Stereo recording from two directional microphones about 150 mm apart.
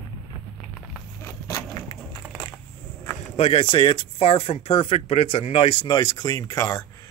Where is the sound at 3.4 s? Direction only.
40° left (ahead or behind).